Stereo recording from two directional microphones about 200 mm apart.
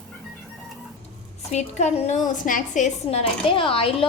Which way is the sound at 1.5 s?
35° left (ahead or behind).